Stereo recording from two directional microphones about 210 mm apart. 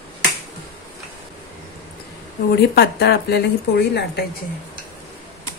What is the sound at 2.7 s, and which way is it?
A woman's voice, 50° left (ahead or behind).